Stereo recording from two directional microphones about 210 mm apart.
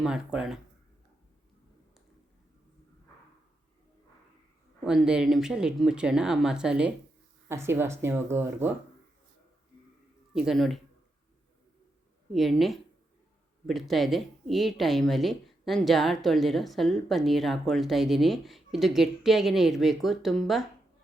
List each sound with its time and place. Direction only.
0.0 s speech: 5° right (ahead or behind)
4.8 s speech: centre (ahead or behind)
10.3 s speech: centre (ahead or behind)
12.3 s speech: centre (ahead or behind)